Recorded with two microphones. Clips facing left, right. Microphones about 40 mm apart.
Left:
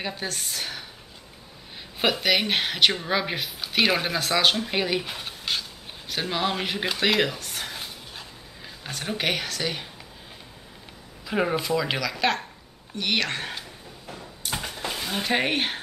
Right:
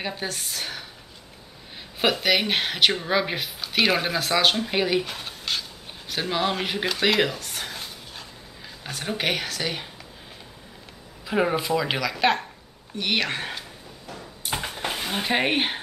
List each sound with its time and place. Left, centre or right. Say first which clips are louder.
0.0 s speech: right 1 dB; centre
2.0 s speech: right 1 dB; centre
5.0 s a sound: even; centre
8.8 s speech: right 1 dB; centre
11.2 s speech: right 2 dB; centre
14.4 s dishes: right 2 dB; centre
14.9 s a sound: right 1 dB; right
15.3 s speech: right 2 dB; centre